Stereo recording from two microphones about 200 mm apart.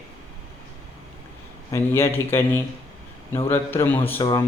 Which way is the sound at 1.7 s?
10° left (ahead or behind).